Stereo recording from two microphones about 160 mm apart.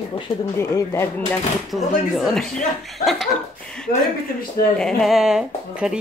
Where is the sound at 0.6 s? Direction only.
15° left (ahead or behind).